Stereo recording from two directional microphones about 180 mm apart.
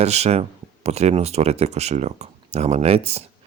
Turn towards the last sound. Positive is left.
turn(degrees=-35)  # may be behind; listen again after turning